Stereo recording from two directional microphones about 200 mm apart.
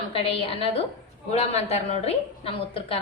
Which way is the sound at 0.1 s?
30° left (ahead or behind).